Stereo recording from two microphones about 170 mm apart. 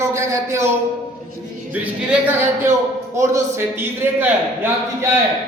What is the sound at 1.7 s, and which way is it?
A woman's voice, 10° right (ahead or behind).